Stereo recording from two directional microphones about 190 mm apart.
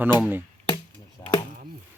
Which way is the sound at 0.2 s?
10° right (ahead or behind).